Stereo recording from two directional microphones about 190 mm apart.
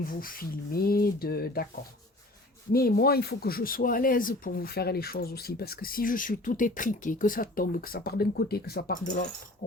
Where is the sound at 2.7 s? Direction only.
55° left (ahead or behind).